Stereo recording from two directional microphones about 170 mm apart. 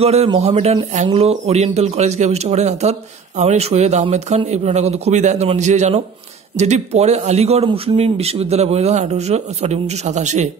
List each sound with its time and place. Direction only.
0.0 s speech: 35° right (ahead or behind)